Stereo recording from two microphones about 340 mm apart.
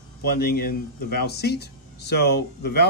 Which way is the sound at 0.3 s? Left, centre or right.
Left.